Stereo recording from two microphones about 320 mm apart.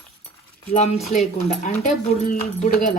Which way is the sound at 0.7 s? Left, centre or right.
Left.